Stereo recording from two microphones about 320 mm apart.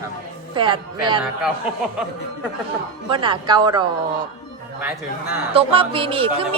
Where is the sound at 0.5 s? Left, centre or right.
Centre.